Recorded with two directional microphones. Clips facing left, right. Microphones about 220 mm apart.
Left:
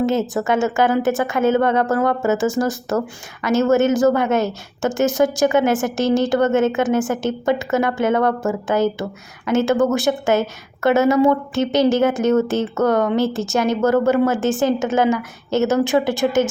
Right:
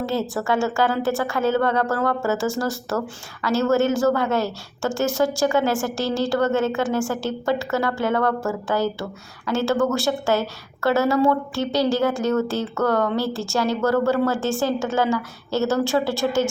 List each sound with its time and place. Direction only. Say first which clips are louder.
0.0 s a woman's voice: left 5 dB; 20° left (ahead or behind)